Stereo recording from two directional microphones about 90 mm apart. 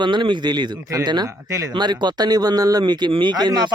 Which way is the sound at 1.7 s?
55° right (ahead or behind).